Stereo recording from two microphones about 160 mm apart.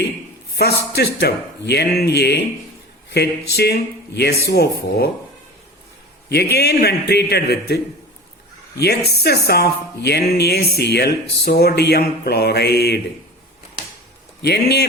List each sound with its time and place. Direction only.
0.5 s speech: 90° left
6.2 s speech: 90° left
14.4 s speech: 90° left